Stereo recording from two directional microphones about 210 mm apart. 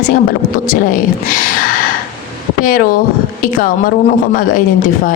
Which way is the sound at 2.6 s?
40° left (ahead or behind).